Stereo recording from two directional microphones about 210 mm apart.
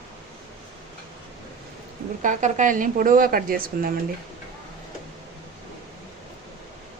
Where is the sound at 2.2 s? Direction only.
35° right (ahead or behind).